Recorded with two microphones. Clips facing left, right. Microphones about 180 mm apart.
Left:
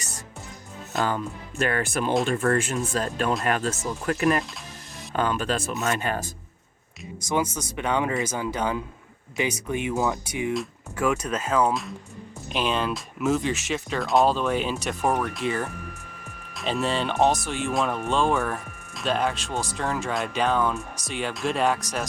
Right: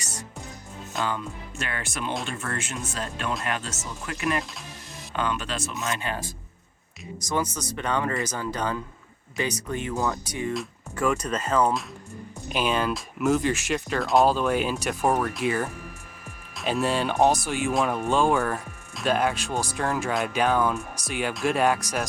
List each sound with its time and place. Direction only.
0.9 s speech: 45° left (ahead or behind)
7.5 s speech: 15° left (ahead or behind); by 22.0 s 5° right (ahead or behind)